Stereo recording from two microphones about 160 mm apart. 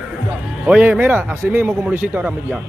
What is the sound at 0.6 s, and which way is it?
Speech, 5° right (ahead or behind).